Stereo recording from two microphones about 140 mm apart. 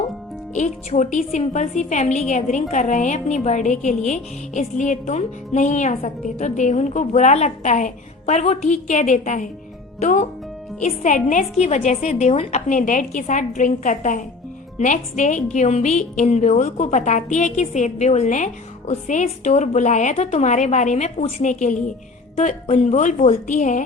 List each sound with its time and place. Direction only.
0.5 s a woman's voice: 60° left (ahead or behind)